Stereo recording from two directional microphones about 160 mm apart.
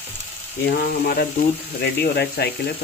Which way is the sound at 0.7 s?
65° left (ahead or behind).